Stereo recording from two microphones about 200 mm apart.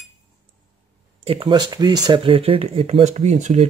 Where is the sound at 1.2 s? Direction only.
25° right (ahead or behind).